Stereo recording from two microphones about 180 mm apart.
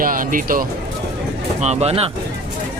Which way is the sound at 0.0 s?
50° right (ahead or behind).